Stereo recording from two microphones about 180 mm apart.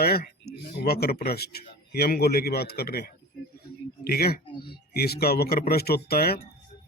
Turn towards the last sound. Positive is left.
turn(degrees=60)  # may be behind; listen again after turning